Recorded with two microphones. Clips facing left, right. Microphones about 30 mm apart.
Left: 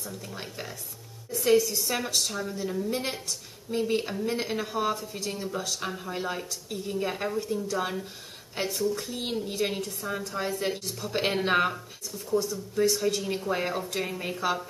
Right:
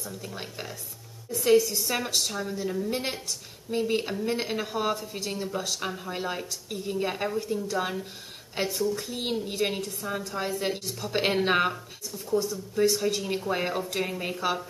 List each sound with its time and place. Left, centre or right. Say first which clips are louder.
0.0 s a woman's voice: right 1 dB; centre